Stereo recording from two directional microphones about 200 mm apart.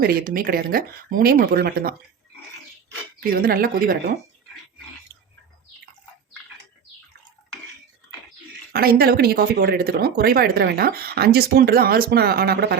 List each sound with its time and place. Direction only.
0.0 s speech: 50° right (ahead or behind)
3.4 s speech: 45° right (ahead or behind)
8.7 s speech: 50° right (ahead or behind)